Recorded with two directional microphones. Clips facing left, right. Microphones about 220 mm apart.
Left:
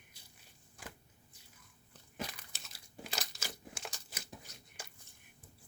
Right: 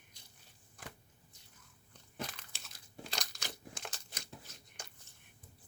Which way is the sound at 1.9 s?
10° left (ahead or behind).